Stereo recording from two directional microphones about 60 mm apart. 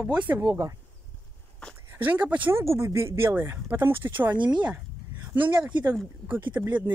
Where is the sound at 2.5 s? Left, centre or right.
Right.